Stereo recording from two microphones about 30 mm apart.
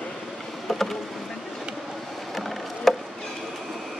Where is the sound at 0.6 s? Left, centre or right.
Centre.